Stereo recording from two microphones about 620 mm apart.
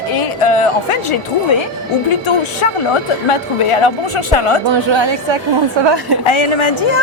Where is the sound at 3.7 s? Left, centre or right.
Left.